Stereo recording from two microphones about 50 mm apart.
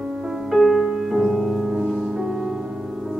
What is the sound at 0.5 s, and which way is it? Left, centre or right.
Music, centre.